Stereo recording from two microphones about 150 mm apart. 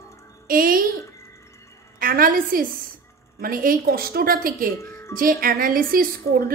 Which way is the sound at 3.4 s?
70° right (ahead or behind).